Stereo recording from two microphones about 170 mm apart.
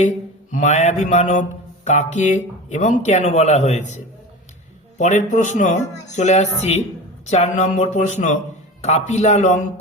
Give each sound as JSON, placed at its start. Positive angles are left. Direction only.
{"t": 0.5, "sound": "mantra", "side_deg": 45}
{"t": 7.3, "sound": "speech", "side_deg": 40}
{"t": 8.8, "sound": "mantra", "side_deg": 40}